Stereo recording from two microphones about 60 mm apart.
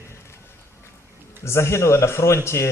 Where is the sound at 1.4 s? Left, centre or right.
Left.